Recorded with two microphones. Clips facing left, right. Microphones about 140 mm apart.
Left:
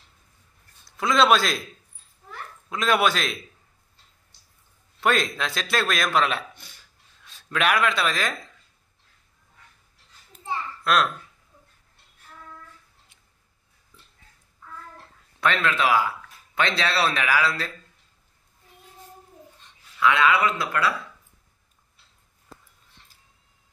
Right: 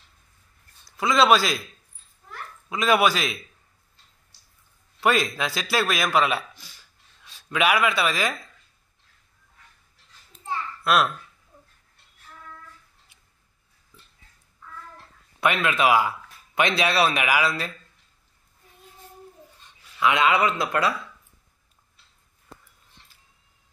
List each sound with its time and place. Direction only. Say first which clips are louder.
0.8 s a man's voice: right 1 dB; centre (ahead or behind)
2.7 s a man's voice: right 2 dB; 5° right (ahead or behind)
5.0 s a man's voice: right 1 dB; 5° right (ahead or behind)
10.8 s babbling: right 1 dB; 5° right (ahead or behind)
15.4 s a man's voice: right 1 dB; 15° right (ahead or behind)
20.0 s speech: even; 20° right (ahead or behind)